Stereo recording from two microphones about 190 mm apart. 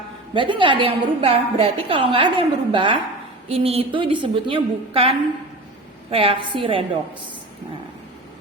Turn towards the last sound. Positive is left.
turn(degrees=-25)  # may be behind; listen again after turning